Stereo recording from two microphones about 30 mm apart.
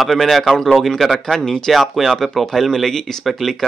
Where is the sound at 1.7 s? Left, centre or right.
Centre.